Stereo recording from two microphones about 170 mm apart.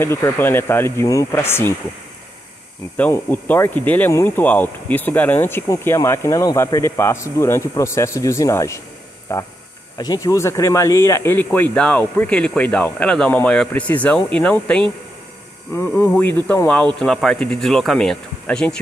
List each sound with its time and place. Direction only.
0.0 s speech: 15° left (ahead or behind)
3.0 s speech: 10° left (ahead or behind)